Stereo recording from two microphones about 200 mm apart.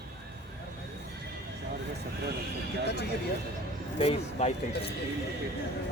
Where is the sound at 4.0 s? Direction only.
30° left (ahead or behind).